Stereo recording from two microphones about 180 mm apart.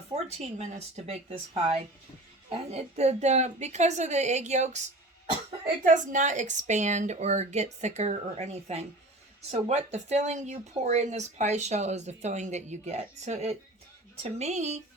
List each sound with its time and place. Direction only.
0.1 s speech: 35° right (ahead or behind)
5.8 s speech: 45° right (ahead or behind)